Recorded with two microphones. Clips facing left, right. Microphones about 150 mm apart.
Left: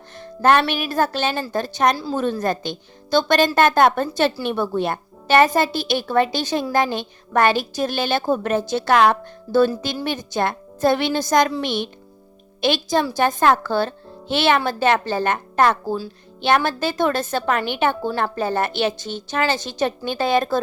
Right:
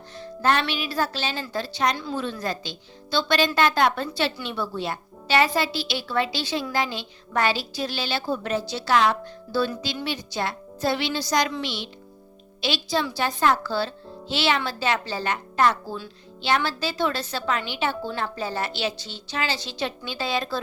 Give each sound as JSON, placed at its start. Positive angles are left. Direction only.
{"t": 0.2, "sound": "music", "side_deg": 55}
{"t": 0.7, "sound": "a woman's voice", "side_deg": 50}
{"t": 2.0, "sound": "a woman's voice", "side_deg": 35}
{"t": 2.2, "sound": "a woman's voice", "side_deg": 50}